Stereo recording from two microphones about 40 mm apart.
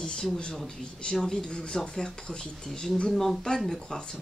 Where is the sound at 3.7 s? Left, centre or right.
Centre.